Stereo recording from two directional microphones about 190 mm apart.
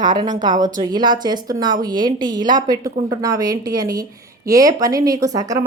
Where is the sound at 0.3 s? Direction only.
20° right (ahead or behind).